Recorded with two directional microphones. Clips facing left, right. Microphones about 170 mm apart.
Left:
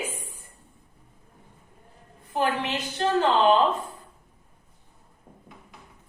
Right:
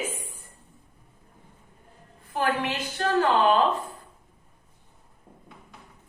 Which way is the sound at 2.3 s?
20° left (ahead or behind).